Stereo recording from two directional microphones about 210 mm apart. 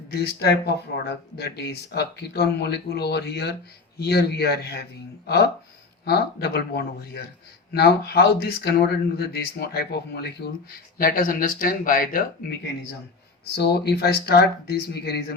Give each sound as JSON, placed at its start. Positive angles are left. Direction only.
{"t": 0.1, "sound": "speech", "side_deg": 50}
{"t": 13.6, "sound": "speech", "side_deg": 50}